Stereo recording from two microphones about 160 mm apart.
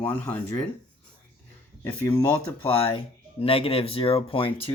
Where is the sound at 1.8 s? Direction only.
15° left (ahead or behind).